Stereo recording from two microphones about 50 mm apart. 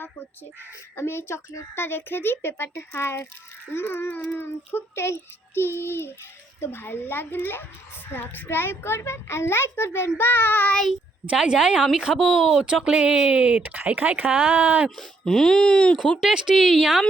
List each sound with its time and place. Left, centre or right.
0.9 s a child's voice: left
9.0 s a child's voice: left
10.2 s a child's voice: left
11.3 s speech: centre
12.8 s speech: centre; by 14.8 s right
14.8 s speech: centre
16.2 s speech: centre
16.6 s speech: centre